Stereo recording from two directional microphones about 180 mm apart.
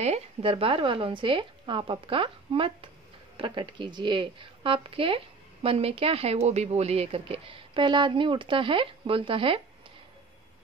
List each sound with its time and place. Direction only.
0.0 s speech: 35° right (ahead or behind)